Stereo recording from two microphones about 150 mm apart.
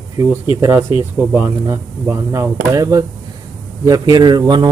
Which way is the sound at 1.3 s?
20° right (ahead or behind).